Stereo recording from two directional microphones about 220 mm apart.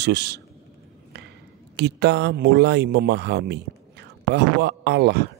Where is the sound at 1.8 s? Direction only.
50° right (ahead or behind).